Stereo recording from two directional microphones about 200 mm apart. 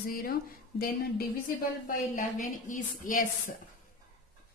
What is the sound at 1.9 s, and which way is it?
A woman's voice, 40° left (ahead or behind).